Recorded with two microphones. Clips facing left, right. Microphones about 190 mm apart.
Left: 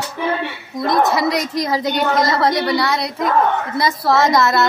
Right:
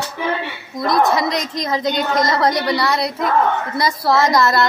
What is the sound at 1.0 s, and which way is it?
A woman's voice, 5° left (ahead or behind).